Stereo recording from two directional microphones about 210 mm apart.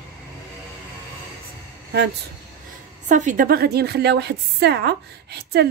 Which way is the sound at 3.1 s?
35° right (ahead or behind).